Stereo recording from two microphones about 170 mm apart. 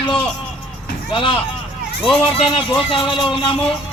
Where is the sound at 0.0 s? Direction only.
30° left (ahead or behind).